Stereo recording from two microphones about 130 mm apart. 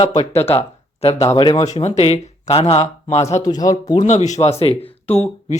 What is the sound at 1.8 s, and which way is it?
Speech, 55° left (ahead or behind).